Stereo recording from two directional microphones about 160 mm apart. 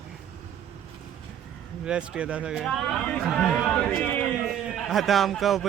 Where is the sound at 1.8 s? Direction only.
5° right (ahead or behind).